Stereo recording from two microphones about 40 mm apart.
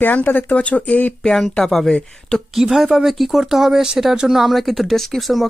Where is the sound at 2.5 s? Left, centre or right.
Centre.